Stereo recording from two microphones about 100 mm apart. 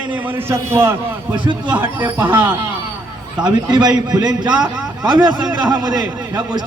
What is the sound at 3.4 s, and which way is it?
A man's voice, 45° right (ahead or behind).